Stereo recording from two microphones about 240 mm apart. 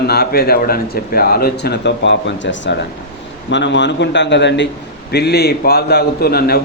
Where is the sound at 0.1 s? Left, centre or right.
Left.